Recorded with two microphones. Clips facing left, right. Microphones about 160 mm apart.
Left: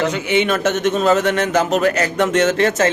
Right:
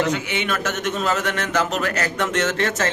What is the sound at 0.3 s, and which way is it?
A man's voice, 25° left (ahead or behind).